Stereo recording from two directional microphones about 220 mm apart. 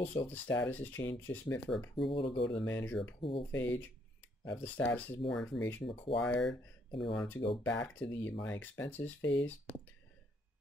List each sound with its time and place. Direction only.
0.3 s speech: 5° left (ahead or behind)
2.0 s speech: 25° left (ahead or behind)
2.5 s speech: 5° left (ahead or behind)
3.2 s speech: 25° left (ahead or behind)
3.5 s speech: 10° left (ahead or behind)
6.9 s speech: 25° left (ahead or behind)
7.2 s speech: 5° left (ahead or behind)